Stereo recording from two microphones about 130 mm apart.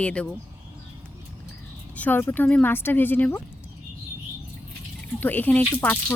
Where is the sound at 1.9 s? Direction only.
15° left (ahead or behind).